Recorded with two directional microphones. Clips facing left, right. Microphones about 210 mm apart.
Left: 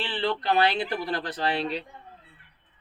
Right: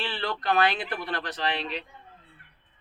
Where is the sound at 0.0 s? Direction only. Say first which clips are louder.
Left 3 dB; 20° left (ahead or behind).